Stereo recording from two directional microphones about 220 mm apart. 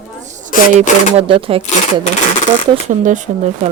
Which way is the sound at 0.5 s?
35° left (ahead or behind).